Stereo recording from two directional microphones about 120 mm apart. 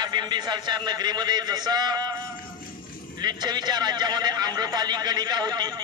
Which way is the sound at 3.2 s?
35° right (ahead or behind).